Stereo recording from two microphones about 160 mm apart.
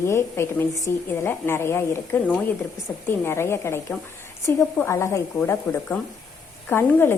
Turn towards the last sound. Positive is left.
turn(degrees=15)  # may be behind; listen again after turning